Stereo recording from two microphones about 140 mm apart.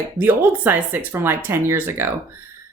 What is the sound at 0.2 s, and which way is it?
Speech, 15° right (ahead or behind).